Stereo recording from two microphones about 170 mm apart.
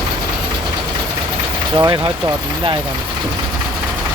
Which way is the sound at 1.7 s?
25° right (ahead or behind).